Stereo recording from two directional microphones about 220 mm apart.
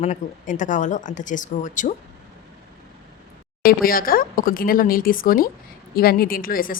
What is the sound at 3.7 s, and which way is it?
Speech, 40° left (ahead or behind).